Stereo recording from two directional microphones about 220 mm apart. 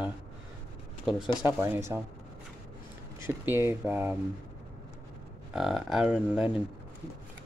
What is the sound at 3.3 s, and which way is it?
Speech, 10° right (ahead or behind).